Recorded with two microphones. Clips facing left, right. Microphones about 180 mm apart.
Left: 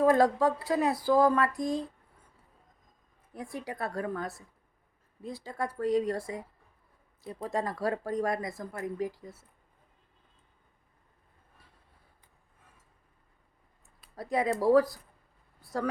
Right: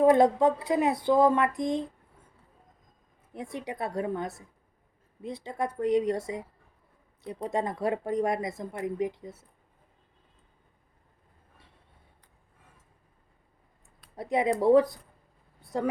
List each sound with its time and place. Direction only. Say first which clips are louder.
0.0 s speech: right 3 dB; 20° right (ahead or behind)
3.3 s speech: right 2 dB; 20° right (ahead or behind)
7.4 s speech: right 2 dB; 20° right (ahead or behind)
14.2 s speech: right 3 dB; 20° right (ahead or behind)
15.6 s a sound: right 3 dB; 20° right (ahead or behind)